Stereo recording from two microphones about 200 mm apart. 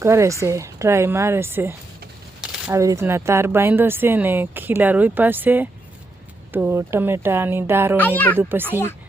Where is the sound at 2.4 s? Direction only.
5° right (ahead or behind).